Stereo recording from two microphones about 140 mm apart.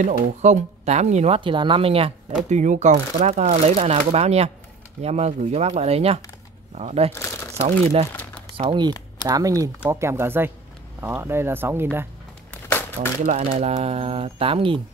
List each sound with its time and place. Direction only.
0.0 s speech: 55° right (ahead or behind)
2.5 s speech: 60° right (ahead or behind)
8.1 s a sound: 10° left (ahead or behind)
8.5 s speech: 35° right (ahead or behind)
9.3 s speech: 25° right (ahead or behind)
13.2 s speech: 50° right (ahead or behind)